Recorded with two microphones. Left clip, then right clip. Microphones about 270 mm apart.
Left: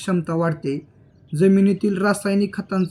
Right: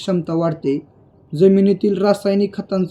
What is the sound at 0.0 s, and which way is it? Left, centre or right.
Speech, left.